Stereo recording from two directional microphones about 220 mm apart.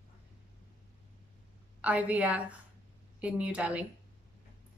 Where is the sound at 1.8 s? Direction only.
5° right (ahead or behind).